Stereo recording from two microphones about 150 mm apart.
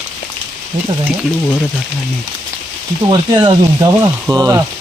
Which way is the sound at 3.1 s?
35° right (ahead or behind).